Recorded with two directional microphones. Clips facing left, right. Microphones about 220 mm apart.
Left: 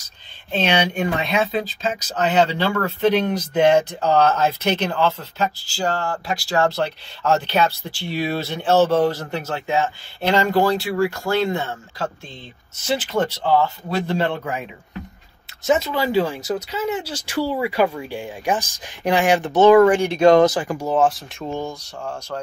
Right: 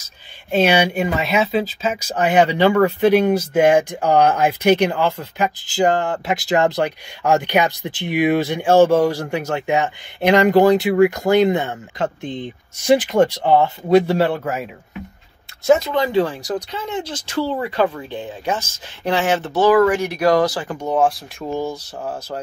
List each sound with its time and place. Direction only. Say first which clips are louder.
0.5 s speech: right 4 dB; 10° right (ahead or behind)
15.6 s speech: right 4 dB; centre (ahead or behind)
21.0 s speech: right 1 dB; centre (ahead or behind)
22.0 s speech: right 1 dB; 20° right (ahead or behind)